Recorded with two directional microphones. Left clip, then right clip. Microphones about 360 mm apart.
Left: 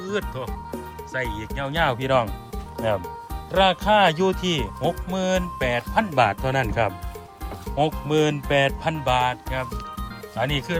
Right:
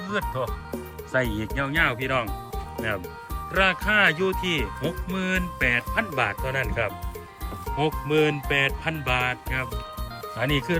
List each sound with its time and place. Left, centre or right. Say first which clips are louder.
0.0 s speech: right 1 dB; centre